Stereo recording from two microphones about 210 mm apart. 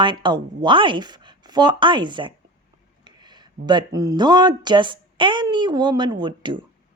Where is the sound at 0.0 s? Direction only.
20° right (ahead or behind).